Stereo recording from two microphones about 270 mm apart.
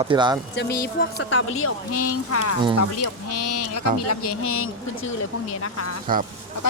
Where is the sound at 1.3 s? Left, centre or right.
Left.